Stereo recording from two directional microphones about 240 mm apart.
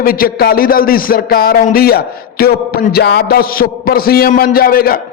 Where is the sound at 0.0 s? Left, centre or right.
Left.